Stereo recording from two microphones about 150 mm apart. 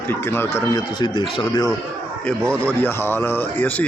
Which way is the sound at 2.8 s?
15° left (ahead or behind).